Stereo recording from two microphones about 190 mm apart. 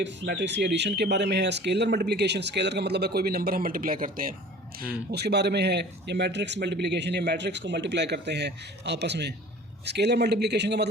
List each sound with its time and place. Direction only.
0.0 s speech: 65° right (ahead or behind); by 4.4 s 45° right (ahead or behind)
5.1 s speech: 60° right (ahead or behind)